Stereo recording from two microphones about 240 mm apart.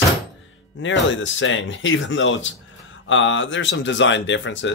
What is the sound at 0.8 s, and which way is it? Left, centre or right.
Speech, left.